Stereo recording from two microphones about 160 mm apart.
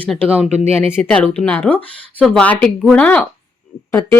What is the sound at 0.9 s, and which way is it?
Speech, 5° left (ahead or behind).